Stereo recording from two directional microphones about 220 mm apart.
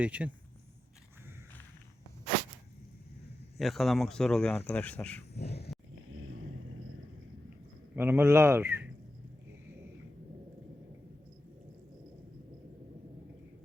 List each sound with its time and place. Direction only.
0.0 s speech: 5° right (ahead or behind)
3.6 s speech: centre (ahead or behind)
5.4 s vehicle: 45° left (ahead or behind)
6.1 s vehicle: 65° right (ahead or behind)
7.9 s speech: 10° right (ahead or behind)